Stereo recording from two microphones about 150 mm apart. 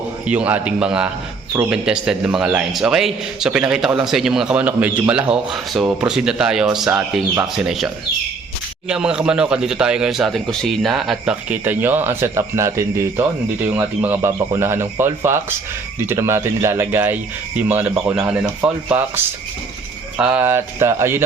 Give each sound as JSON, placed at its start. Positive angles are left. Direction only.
{"t": 0.3, "sound": "a man's voice", "side_deg": -10}
{"t": 8.9, "sound": "a man's voice", "side_deg": -5}
{"t": 20.1, "sound": "speech", "side_deg": -10}